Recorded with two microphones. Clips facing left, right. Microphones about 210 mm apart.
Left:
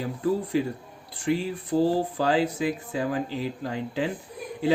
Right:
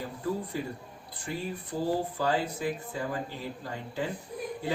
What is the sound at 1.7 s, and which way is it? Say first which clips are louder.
Speech: left 11 dB; 80° left.